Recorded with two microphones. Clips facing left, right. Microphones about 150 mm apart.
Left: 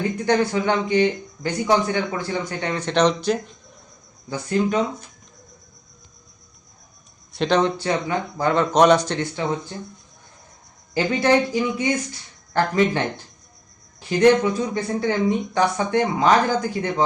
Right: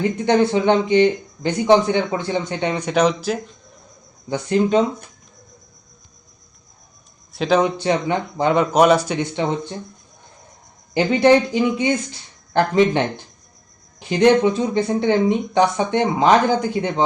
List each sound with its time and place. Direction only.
0.3 s speech: 25° right (ahead or behind); by 3.3 s 5° right (ahead or behind)
4.3 s speech: 20° right (ahead or behind)
7.3 s speech: 5° right (ahead or behind)
7.8 s speech: 20° right (ahead or behind)
8.7 s speech: 5° right (ahead or behind)
9.3 s speech: 25° right (ahead or behind)
10.9 s speech: 20° right (ahead or behind)
14.1 s speech: 20° right (ahead or behind)